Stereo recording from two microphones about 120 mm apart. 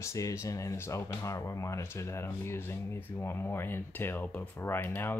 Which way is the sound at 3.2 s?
20° left (ahead or behind).